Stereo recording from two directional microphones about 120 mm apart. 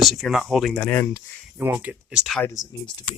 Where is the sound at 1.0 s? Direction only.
20° left (ahead or behind).